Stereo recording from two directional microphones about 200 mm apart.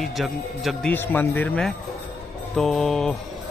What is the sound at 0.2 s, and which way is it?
A man's voice, centre (ahead or behind).